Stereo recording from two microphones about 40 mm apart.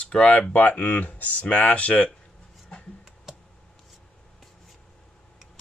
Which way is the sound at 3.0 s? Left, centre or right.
Centre.